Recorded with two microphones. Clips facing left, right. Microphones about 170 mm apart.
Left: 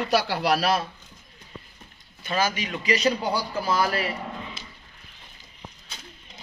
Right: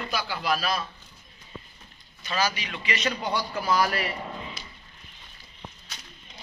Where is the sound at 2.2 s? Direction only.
50° left (ahead or behind); by 4.6 s 30° left (ahead or behind).